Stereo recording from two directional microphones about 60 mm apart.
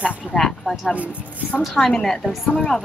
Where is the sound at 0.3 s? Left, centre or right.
Centre.